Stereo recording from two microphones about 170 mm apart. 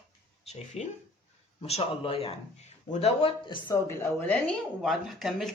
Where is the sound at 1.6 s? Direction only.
35° left (ahead or behind).